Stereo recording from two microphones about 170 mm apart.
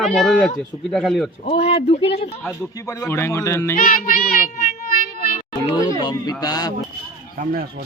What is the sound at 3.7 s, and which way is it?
Child singing, 60° left (ahead or behind).